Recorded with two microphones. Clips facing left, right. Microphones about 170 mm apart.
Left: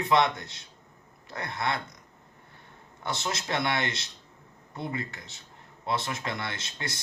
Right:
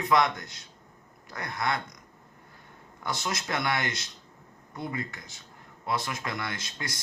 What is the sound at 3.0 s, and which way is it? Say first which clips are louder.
Speech: even; 25° left (ahead or behind).